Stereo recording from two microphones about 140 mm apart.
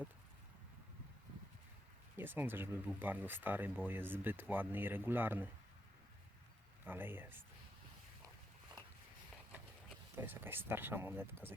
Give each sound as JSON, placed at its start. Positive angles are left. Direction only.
{"t": 2.1, "sound": "speech", "side_deg": -15}
{"t": 6.8, "sound": "speech", "side_deg": -15}
{"t": 10.2, "sound": "speech", "side_deg": -15}